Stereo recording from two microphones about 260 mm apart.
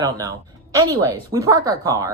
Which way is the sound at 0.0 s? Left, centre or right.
Centre.